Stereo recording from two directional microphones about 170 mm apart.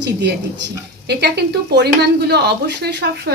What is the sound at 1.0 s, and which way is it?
A woman's voice, 75° right (ahead or behind).